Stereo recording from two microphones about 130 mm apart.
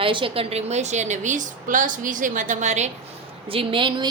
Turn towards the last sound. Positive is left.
turn(degrees=-40)  # may be behind; listen again after turning